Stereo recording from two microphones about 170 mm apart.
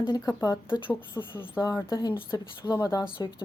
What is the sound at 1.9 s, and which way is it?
A woman's voice, 25° left (ahead or behind).